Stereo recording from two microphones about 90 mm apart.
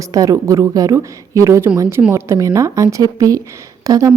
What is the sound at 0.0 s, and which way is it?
A woman's voice, 40° right (ahead or behind).